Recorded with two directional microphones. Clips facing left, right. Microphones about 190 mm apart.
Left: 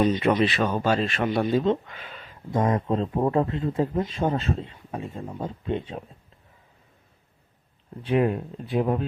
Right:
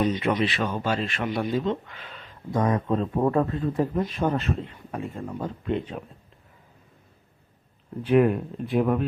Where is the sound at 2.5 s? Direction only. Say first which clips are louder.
Even; 25° left (ahead or behind).